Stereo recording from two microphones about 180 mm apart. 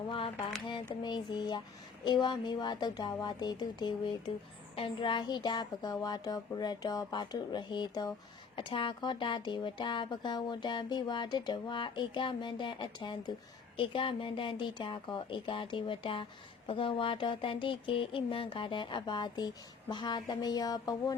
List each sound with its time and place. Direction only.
1.0 s speech: 25° left (ahead or behind)